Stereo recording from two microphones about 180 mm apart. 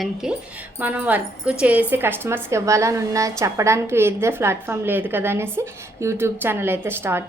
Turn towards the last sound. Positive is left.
turn(degrees=-15)  # may be behind; listen again after turning